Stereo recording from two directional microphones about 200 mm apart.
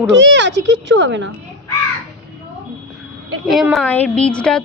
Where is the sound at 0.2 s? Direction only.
65° right (ahead or behind).